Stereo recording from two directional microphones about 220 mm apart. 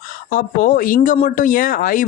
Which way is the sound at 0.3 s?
40° left (ahead or behind).